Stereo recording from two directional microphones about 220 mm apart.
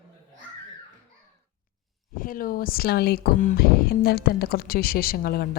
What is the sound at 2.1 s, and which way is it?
Speech, 40° left (ahead or behind).